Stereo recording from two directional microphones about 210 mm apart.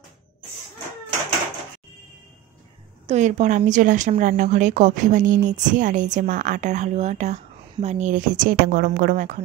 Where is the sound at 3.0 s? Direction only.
35° right (ahead or behind).